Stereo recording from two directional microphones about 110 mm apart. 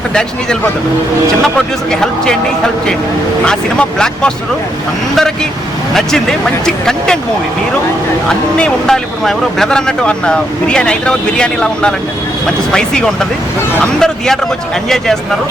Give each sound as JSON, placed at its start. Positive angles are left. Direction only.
{"t": 1.9, "sound": "speech", "side_deg": 5}
{"t": 3.4, "sound": "speech", "side_deg": 5}
{"t": 5.9, "sound": "speech", "side_deg": 5}
{"t": 8.3, "sound": "speech", "side_deg": 5}